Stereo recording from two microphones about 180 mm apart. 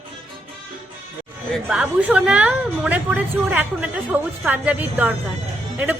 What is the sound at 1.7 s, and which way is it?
A woman's voice, 5° right (ahead or behind).